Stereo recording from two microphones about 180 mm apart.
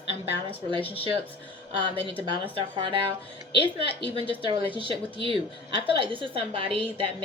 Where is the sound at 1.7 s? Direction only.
30° right (ahead or behind).